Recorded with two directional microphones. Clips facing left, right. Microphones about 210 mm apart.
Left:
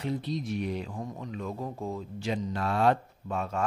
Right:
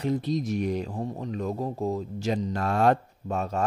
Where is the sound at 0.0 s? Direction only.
45° right (ahead or behind).